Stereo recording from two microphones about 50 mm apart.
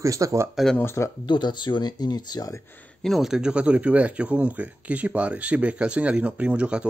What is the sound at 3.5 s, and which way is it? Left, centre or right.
Speech, right.